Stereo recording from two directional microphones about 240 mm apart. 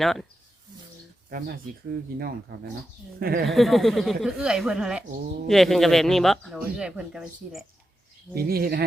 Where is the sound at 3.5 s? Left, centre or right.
Centre.